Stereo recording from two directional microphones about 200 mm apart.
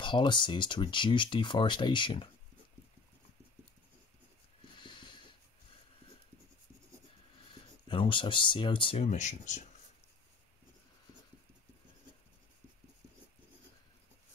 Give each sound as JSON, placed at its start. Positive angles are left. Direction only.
{"t": 0.0, "sound": "speech", "side_deg": 25}
{"t": 4.7, "sound": "a sound", "side_deg": 25}
{"t": 7.9, "sound": "speech", "side_deg": 25}